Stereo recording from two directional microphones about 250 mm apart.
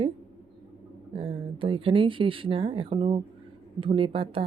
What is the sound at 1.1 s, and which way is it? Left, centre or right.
Speech, right.